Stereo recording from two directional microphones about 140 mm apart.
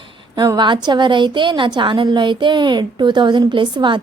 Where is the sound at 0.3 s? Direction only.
30° right (ahead or behind).